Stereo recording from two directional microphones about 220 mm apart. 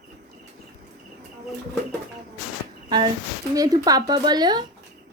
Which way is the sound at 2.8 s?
20° right (ahead or behind).